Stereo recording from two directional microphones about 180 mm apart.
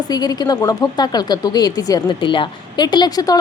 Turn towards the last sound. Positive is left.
turn(degrees=20)  # may be behind; listen again after turning